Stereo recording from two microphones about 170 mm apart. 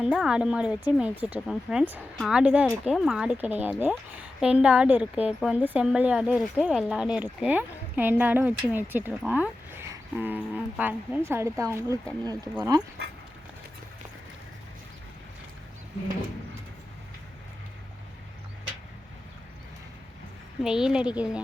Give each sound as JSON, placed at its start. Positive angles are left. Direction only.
{"t": 0.0, "sound": "speech", "side_deg": -5}
{"t": 20.6, "sound": "speech", "side_deg": -5}